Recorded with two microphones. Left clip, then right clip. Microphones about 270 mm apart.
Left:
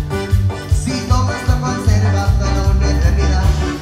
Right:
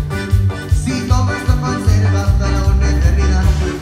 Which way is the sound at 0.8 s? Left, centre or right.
Left.